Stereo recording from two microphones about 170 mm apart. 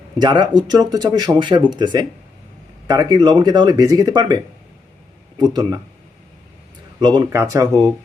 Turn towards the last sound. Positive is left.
turn(degrees=-20)  # may be behind; listen again after turning